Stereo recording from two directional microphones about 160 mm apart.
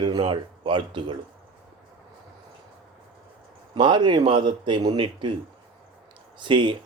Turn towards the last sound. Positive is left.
turn(degrees=-30)  # may be behind; listen again after turning